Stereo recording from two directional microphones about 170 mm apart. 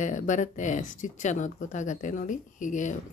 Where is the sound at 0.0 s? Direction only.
50° left (ahead or behind).